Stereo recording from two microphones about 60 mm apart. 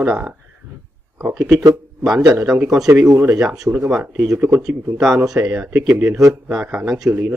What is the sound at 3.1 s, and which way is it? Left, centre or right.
Speech, right.